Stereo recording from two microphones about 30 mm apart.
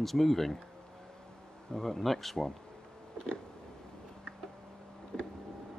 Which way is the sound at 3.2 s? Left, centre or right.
Left.